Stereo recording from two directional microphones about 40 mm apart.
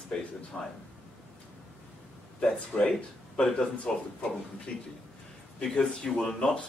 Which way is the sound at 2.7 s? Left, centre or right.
Left.